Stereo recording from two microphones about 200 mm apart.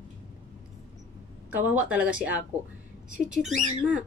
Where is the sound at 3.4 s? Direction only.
35° right (ahead or behind).